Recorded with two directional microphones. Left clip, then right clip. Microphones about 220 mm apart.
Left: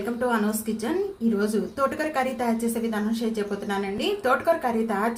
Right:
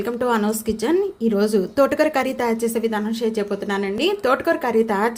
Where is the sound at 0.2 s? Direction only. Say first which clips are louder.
Right 4 dB; 40° right (ahead or behind).